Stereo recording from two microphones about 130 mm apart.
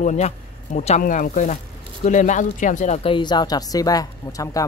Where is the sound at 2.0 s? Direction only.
70° left (ahead or behind).